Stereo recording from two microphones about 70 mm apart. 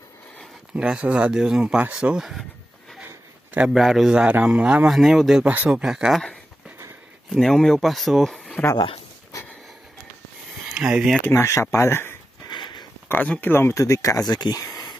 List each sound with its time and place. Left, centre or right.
0.7 s a man's voice: centre
3.6 s a man's voice: centre
4.8 s speech: centre
5.4 s speech: right
5.7 s a man's voice: centre
7.2 s speech: centre
10.7 s speech: centre
11.2 s speech: left
12.4 s a sound: left
13.1 s speech: left
13.5 s speech: left
13.8 s speech: left
14.3 s a sound: left